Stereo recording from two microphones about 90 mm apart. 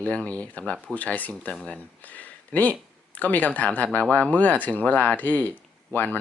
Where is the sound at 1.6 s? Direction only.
15° left (ahead or behind).